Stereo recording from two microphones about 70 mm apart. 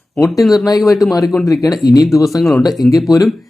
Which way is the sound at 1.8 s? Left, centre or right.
Left.